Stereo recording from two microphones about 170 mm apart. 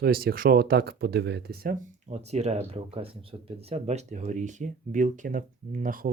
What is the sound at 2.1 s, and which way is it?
Speech, 40° right (ahead or behind).